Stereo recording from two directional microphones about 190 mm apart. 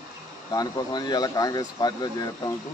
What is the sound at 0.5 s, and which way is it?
Speech, 20° left (ahead or behind).